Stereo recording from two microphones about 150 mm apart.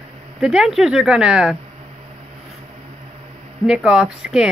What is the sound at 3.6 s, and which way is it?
Speech, 5° right (ahead or behind).